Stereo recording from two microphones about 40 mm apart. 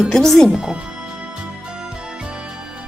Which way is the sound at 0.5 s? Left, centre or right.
Right.